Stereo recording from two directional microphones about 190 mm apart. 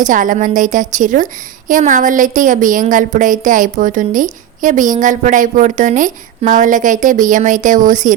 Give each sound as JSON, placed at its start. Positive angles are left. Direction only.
{"t": 0.0, "sound": "a woman's voice", "side_deg": -45}